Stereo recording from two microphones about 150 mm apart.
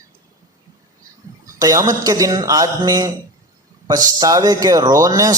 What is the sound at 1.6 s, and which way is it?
Speech, 25° right (ahead or behind).